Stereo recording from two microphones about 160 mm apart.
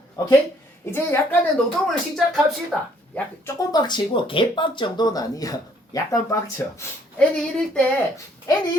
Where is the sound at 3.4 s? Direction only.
25° left (ahead or behind); by 7.9 s 5° left (ahead or behind).